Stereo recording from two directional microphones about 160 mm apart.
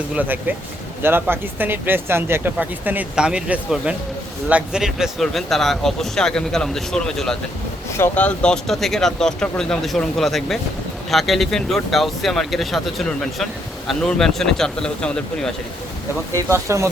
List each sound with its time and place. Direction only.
0.2 s speech: 10° right (ahead or behind); by 15.5 s 5° left (ahead or behind)
16.3 s speech: 20° right (ahead or behind)